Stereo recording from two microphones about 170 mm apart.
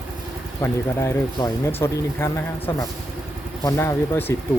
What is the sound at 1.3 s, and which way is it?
Speech, 25° left (ahead or behind).